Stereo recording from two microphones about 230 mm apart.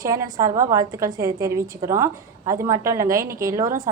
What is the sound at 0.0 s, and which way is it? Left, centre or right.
Speech, centre.